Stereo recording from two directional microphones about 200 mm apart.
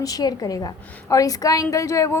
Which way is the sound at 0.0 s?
20° left (ahead or behind).